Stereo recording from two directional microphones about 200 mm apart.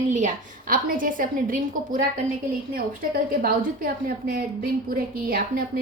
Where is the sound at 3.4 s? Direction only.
45° right (ahead or behind).